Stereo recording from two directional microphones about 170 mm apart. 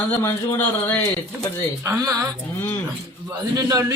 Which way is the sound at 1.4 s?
15° right (ahead or behind).